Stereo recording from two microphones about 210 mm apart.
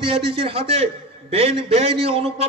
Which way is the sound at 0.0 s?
25° right (ahead or behind).